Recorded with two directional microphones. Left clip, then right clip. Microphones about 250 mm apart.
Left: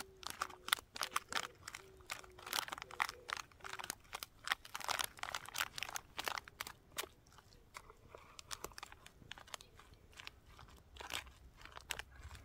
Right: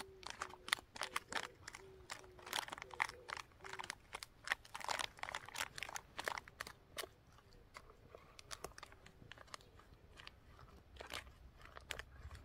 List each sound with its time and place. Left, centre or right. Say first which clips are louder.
0.0 s a sound: left 4 dB; centre
10.2 s biting: left 4 dB; centre
11.0 s crunch: left 4 dB; centre